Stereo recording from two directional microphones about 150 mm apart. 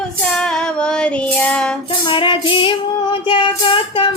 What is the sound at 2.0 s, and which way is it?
Music, 35° left (ahead or behind).